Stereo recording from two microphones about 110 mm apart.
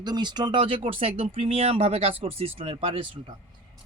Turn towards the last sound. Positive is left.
turn(degrees=-50)  # may be behind; listen again after turning